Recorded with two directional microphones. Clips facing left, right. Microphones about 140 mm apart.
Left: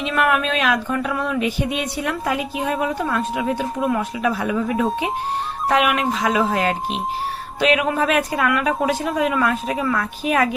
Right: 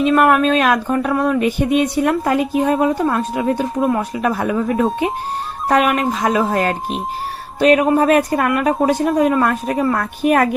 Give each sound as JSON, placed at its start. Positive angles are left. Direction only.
{"t": 0.0, "sound": "speech", "side_deg": -45}
{"t": 5.6, "sound": "speech", "side_deg": -40}